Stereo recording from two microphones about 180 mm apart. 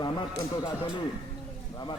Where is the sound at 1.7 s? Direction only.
25° left (ahead or behind).